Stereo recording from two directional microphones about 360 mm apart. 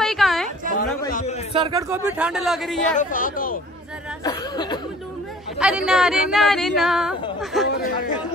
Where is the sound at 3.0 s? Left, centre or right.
Left.